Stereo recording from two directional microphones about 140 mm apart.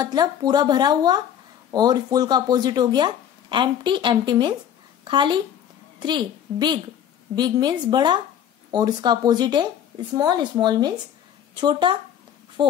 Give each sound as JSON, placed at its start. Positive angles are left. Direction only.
{"t": 0.0, "sound": "a child's voice", "side_deg": -30}